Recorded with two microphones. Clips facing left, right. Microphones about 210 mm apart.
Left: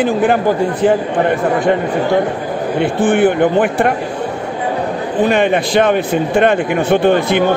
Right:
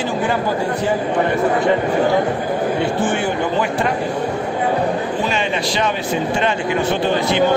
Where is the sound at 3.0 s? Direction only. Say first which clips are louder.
Left 8 dB; 55° left (ahead or behind).